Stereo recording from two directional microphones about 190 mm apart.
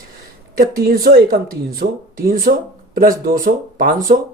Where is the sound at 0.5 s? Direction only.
50° right (ahead or behind).